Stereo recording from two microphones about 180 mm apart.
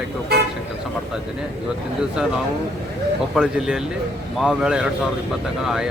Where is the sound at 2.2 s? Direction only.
5° right (ahead or behind).